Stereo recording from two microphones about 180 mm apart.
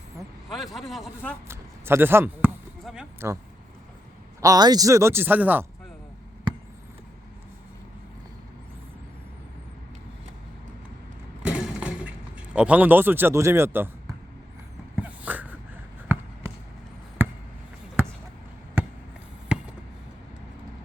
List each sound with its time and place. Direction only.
0.5 s a man's voice: centre (ahead or behind)
1.5 s speech: 15° right (ahead or behind)
4.4 s speech: 20° right (ahead or behind)
6.5 s a sound: 25° right (ahead or behind)
11.4 s a sound: 5° right (ahead or behind)
12.5 s speech: 5° right (ahead or behind)
14.9 s dog: 10° right (ahead or behind)
16.1 s basketball bounce: 10° right (ahead or behind)
18.8 s a sound: 10° right (ahead or behind)
19.5 s basketball bounce: 5° right (ahead or behind)